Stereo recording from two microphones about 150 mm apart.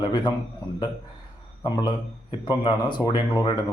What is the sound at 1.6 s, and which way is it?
Speech, 30° left (ahead or behind).